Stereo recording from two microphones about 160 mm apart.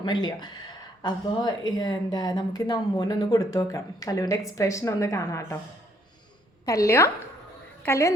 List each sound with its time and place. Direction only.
0.0 s speech: 25° left (ahead or behind)
6.7 s a woman's voice: 20° left (ahead or behind)